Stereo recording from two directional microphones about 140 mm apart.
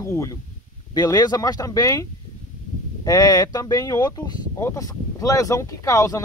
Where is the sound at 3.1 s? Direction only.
30° left (ahead or behind).